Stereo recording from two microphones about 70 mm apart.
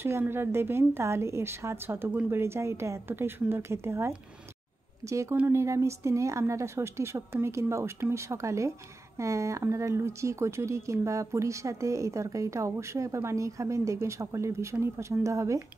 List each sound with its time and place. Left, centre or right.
0.3 s a woman's voice: right